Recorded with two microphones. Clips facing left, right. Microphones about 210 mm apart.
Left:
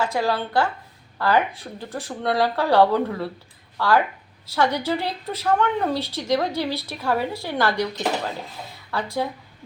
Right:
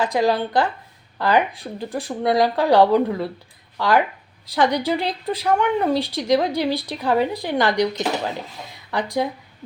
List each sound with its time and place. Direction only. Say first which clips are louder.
0.0 s speech: right 4 dB; 15° right (ahead or behind)